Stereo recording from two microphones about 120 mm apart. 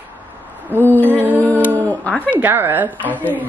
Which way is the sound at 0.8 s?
15° left (ahead or behind).